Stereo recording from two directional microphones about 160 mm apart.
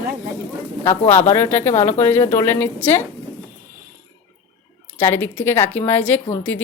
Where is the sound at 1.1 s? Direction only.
15° left (ahead or behind).